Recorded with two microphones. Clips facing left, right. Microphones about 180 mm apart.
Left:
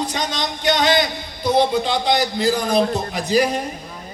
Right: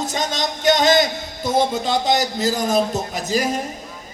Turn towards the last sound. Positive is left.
turn(degrees=-45)  # may be behind; listen again after turning